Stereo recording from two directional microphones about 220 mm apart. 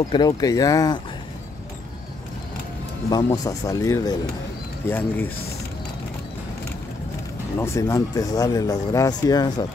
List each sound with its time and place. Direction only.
0.1 s speech: 15° left (ahead or behind)
3.1 s speech: 15° left (ahead or behind)
7.5 s speech: 10° left (ahead or behind)